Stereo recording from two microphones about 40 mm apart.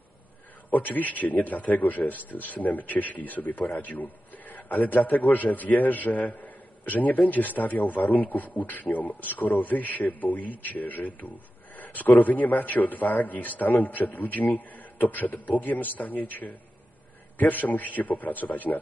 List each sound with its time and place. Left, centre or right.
0.7 s a man's voice: left